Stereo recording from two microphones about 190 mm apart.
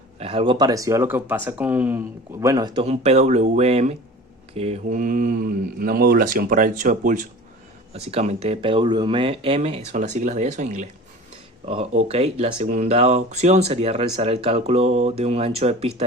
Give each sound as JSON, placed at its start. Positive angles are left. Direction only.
{"t": 0.2, "sound": "speech", "side_deg": -30}
{"t": 2.8, "sound": "speech", "side_deg": -35}